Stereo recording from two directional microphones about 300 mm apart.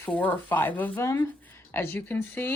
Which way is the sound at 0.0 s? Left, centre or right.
Centre.